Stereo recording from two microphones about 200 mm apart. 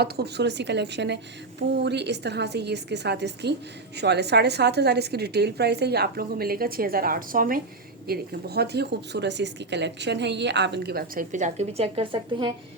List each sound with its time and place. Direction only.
0.0 s a woman's voice: 55° right (ahead or behind); by 12.5 s 25° right (ahead or behind)